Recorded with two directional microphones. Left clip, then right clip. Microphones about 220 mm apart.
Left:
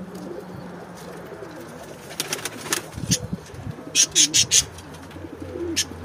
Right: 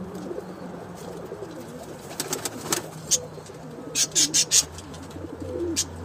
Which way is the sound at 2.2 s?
50° right (ahead or behind).